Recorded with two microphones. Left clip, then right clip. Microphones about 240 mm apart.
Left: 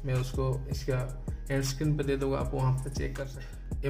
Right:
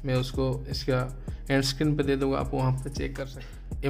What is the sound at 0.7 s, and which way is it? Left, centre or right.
A man's voice, right.